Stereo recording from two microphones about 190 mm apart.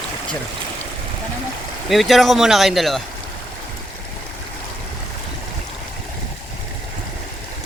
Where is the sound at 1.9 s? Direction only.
Centre (ahead or behind).